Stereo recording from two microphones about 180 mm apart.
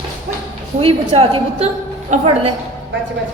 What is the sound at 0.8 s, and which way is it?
A woman's voice, 30° right (ahead or behind).